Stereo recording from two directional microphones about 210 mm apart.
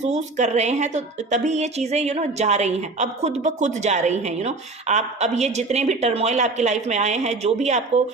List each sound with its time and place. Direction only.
0.0 s a woman's voice: 35° right (ahead or behind)